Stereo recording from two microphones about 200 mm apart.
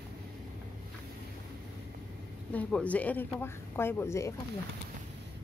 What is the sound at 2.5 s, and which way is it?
Speech, 5° left (ahead or behind).